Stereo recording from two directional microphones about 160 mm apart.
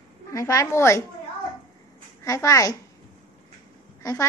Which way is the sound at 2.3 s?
20° left (ahead or behind).